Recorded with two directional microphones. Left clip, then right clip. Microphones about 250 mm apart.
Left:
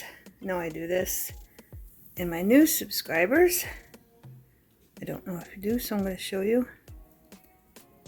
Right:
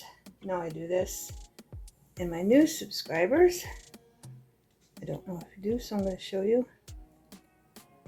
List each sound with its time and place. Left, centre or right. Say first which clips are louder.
0.4 s speech: left 2 dB; left
2.1 s speech: left 2 dB; left
5.0 s speech: left 2 dB; left